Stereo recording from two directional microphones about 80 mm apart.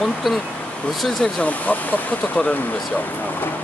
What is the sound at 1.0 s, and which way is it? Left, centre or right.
Speech, centre.